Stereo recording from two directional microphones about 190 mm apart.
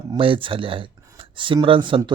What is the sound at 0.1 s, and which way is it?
Speech, 25° right (ahead or behind).